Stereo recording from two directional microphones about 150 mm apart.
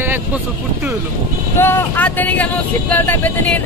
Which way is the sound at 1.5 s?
15° left (ahead or behind).